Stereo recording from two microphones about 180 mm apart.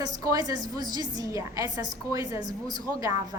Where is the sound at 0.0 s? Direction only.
20° right (ahead or behind).